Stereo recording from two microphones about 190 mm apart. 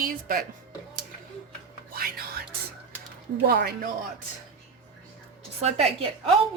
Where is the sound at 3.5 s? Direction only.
55° right (ahead or behind).